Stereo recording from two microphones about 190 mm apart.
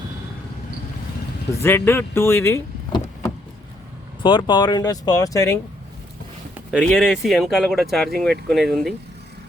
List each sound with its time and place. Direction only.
1.6 s speech: 10° left (ahead or behind)
4.2 s speech: 25° left (ahead or behind)
6.5 s speech: 5° right (ahead or behind)